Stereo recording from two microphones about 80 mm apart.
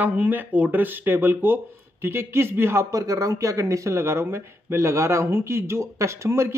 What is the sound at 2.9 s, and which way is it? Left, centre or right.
Speech, right.